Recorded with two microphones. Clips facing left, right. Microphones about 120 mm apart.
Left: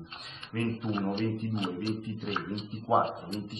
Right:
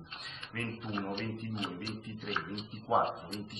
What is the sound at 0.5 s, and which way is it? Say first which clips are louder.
Speech: left 7 dB; 20° left (ahead or behind).